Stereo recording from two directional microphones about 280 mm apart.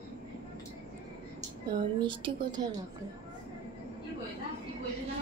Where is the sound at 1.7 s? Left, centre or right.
Centre.